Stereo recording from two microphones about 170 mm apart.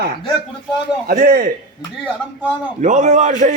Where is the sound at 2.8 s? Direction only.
45° right (ahead or behind).